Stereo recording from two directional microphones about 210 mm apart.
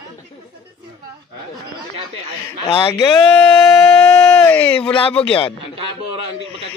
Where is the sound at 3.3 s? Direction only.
Centre (ahead or behind).